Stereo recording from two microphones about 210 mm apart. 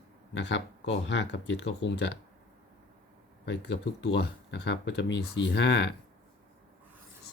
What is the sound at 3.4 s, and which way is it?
Speech, 55° left (ahead or behind).